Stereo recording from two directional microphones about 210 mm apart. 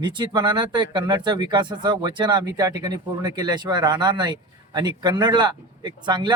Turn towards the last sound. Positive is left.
turn(degrees=-20)  # may be behind; listen again after turning